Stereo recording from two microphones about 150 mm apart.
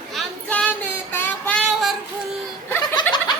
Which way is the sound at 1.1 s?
15° left (ahead or behind).